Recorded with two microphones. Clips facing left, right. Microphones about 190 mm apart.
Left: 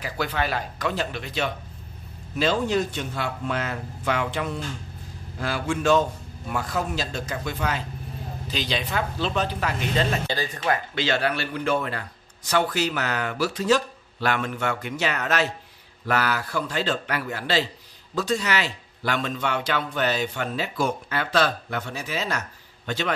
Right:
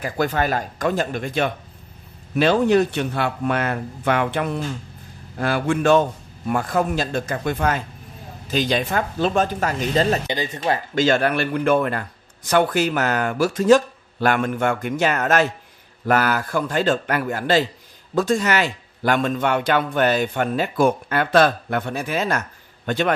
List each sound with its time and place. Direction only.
0.0 s speech: 45° right (ahead or behind)
2.3 s speech: 65° right (ahead or behind); by 10.2 s 40° right (ahead or behind)
10.2 s speech: 20° right (ahead or behind)
11.0 s speech: 50° right (ahead or behind)